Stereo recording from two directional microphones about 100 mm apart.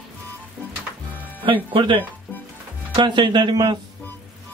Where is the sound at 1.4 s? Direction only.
55° right (ahead or behind).